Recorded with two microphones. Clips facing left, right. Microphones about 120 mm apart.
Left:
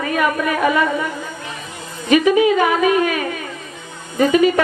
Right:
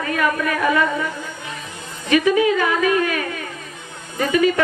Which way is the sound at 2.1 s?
20° left (ahead or behind).